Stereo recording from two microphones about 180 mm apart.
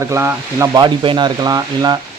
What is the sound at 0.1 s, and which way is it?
Speech, 15° right (ahead or behind).